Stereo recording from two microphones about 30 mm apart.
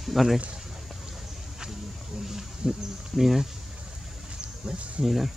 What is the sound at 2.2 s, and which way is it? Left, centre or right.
Speech, centre.